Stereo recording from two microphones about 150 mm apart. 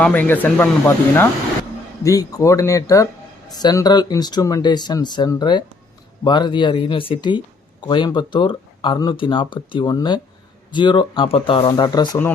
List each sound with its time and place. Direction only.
0.0 s speech: 10° left (ahead or behind); by 12.2 s 25° left (ahead or behind)